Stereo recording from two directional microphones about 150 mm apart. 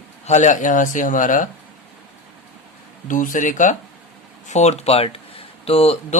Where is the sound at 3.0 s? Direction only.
60° left (ahead or behind).